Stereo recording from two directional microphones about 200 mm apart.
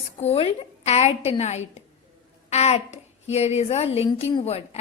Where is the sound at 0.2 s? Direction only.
30° left (ahead or behind).